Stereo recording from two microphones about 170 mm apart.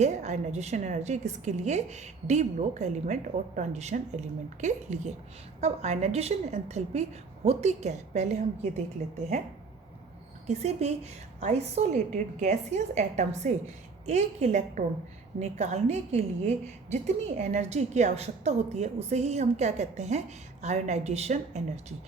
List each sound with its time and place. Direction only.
0.0 s a woman's voice: 45° right (ahead or behind)
10.4 s a woman's voice: 40° right (ahead or behind)